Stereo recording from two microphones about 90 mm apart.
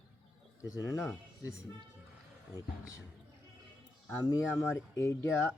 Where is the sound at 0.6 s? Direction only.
40° left (ahead or behind).